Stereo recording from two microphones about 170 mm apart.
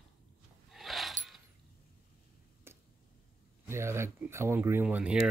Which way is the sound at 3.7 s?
15° right (ahead or behind).